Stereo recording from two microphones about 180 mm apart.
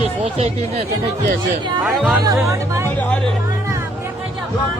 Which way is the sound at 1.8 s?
5° right (ahead or behind).